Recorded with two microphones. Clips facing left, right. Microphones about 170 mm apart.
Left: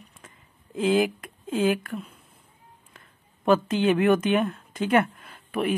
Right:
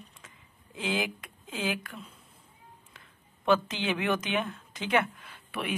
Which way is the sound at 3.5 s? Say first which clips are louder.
Left 6 dB; 50° left (ahead or behind).